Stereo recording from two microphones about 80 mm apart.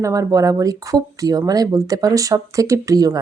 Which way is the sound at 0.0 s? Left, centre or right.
Right.